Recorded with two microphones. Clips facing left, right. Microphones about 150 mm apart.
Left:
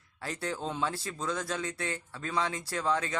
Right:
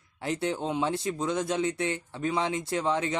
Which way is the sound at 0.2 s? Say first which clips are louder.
Right 6 dB; 20° right (ahead or behind).